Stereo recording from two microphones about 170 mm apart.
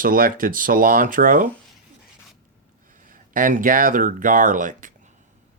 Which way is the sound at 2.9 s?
50° right (ahead or behind).